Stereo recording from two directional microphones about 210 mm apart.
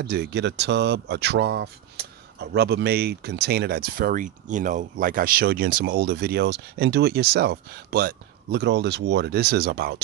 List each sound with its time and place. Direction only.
0.0 s speech: 50° right (ahead or behind)